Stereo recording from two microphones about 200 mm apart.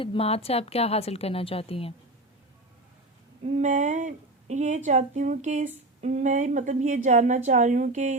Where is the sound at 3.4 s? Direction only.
35° right (ahead or behind).